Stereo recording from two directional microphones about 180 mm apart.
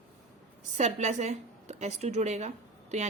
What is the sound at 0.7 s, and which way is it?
A woman's voice, 40° right (ahead or behind).